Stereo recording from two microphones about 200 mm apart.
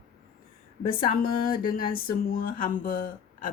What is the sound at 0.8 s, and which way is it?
Speech, 45° left (ahead or behind).